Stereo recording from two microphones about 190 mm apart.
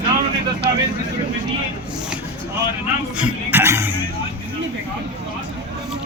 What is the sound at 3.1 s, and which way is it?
Speech, 10° right (ahead or behind).